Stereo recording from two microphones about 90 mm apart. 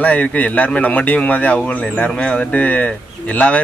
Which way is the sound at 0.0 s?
15° left (ahead or behind).